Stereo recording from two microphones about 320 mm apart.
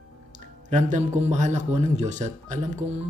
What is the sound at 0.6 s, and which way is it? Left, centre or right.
Speech, right.